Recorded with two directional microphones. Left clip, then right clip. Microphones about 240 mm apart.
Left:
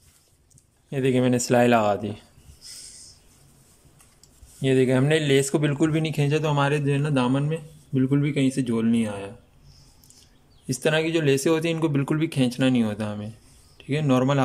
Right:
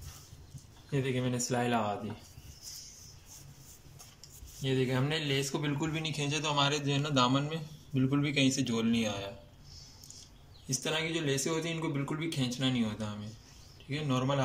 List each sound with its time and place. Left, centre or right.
0.8 s speech: left
4.6 s speech: left
10.7 s speech: left